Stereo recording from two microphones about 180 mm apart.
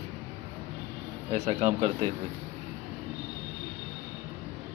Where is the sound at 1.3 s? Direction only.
35° right (ahead or behind).